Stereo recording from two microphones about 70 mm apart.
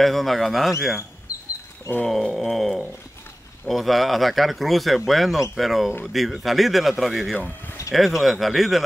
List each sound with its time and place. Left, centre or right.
0.0 s speech: centre
2.0 s speech: centre
7.3 s speech: left
7.9 s speech: centre